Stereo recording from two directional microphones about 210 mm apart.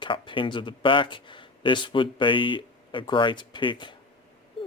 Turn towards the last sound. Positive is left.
turn(degrees=25)  # may be behind; listen again after turning